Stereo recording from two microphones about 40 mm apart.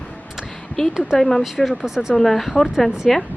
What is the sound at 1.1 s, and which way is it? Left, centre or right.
Speech, centre.